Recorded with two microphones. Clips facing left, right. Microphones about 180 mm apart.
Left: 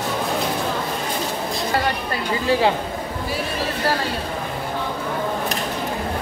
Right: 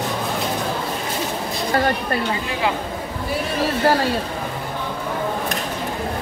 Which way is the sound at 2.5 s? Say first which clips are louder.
Left 9 dB; 30° left (ahead or behind).